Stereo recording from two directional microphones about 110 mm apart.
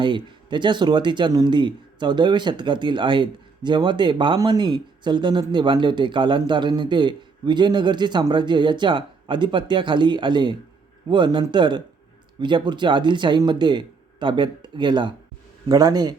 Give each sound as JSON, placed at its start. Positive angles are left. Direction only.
{"t": 0.0, "sound": "speech", "side_deg": -45}